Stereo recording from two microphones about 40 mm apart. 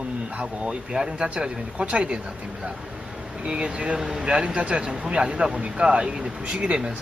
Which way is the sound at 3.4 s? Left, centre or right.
Right.